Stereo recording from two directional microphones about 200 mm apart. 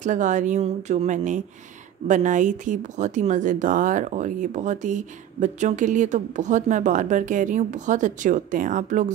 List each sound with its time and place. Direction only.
0.0 s speech: 40° right (ahead or behind)